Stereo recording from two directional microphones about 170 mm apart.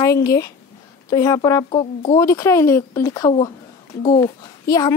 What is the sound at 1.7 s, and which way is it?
Speech, 35° left (ahead or behind).